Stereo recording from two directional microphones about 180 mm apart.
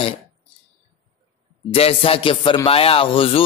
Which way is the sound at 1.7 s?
35° left (ahead or behind).